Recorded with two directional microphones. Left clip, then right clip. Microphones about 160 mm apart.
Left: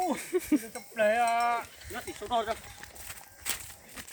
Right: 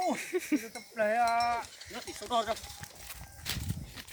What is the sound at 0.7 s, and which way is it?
Cowbell, 55° left (ahead or behind).